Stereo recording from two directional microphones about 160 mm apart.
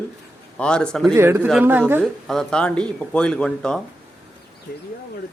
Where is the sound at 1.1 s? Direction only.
15° right (ahead or behind).